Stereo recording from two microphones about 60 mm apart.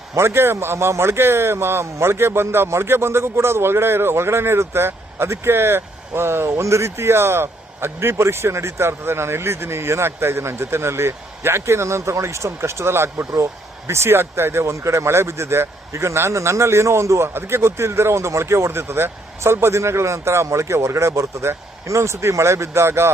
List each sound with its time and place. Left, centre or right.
0.2 s speech: right